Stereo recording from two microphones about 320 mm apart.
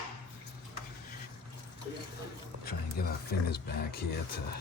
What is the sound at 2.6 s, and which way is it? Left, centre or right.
Speech, left.